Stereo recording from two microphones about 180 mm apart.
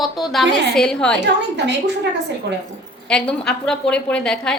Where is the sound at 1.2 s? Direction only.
75° right (ahead or behind).